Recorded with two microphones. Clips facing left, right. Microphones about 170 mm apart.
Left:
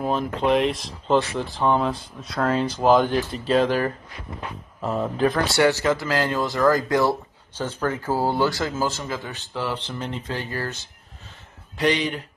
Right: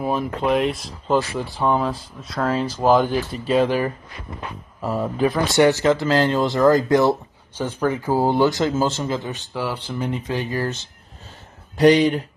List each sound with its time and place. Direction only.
0.0 s speech: 5° right (ahead or behind)
5.5 s speech: 20° right (ahead or behind)
9.5 s speech: 10° right (ahead or behind)
11.7 s speech: 40° right (ahead or behind)